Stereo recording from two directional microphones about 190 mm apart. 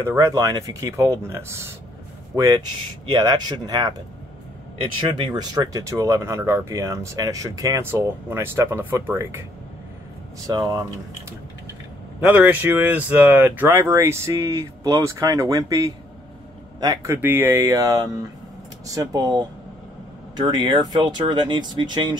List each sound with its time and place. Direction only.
0.0 s speech: 15° right (ahead or behind)
5.1 s speech: 20° right (ahead or behind)
10.4 s speech: 20° right (ahead or behind)
12.2 s speech: 10° right (ahead or behind)